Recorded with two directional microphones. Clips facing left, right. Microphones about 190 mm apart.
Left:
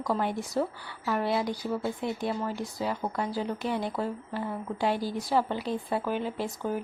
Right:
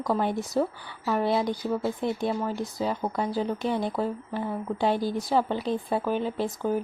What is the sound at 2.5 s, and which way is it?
Speech, 20° right (ahead or behind).